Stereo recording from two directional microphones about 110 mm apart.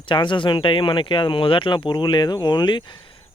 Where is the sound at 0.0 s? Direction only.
45° left (ahead or behind).